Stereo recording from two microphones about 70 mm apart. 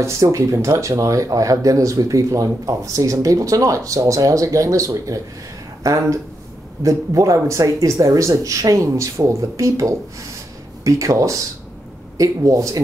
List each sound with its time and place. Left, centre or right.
0.0 s speech: right
6.8 s speech: right